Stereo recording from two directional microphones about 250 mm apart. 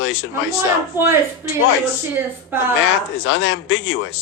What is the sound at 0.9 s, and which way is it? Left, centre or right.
Speech, centre.